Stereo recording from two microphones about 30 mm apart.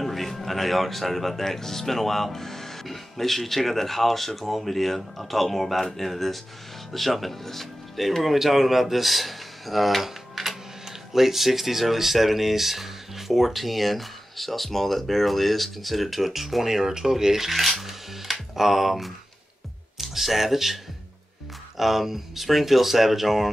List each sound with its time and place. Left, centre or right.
0.0 s speech: centre
16.6 s speech: centre
17.5 s music: centre
20.0 s speech: centre